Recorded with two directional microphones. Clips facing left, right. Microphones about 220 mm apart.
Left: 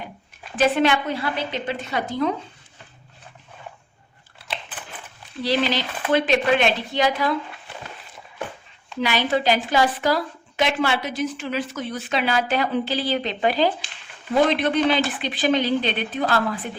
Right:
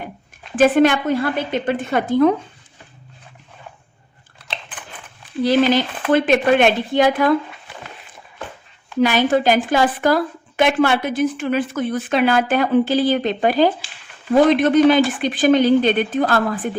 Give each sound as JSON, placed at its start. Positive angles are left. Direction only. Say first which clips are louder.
{"t": 0.5, "sound": "a woman's voice", "louder": "right 6 dB", "side_deg": -50}
{"t": 5.4, "sound": "a woman's voice", "louder": "right 7 dB", "side_deg": -50}
{"t": 9.0, "sound": "a woman's voice", "louder": "right 6 dB", "side_deg": -50}